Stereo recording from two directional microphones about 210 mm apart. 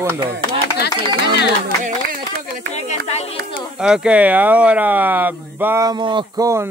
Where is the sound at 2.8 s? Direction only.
30° left (ahead or behind).